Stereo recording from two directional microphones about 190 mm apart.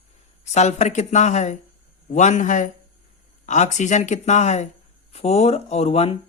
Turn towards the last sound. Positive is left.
turn(degrees=30)  # may be behind; listen again after turning